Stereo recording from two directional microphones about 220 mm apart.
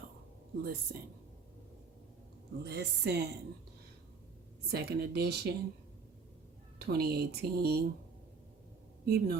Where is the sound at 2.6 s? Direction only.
50° right (ahead or behind).